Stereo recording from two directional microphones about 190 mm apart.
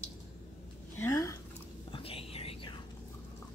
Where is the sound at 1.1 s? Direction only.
15° left (ahead or behind).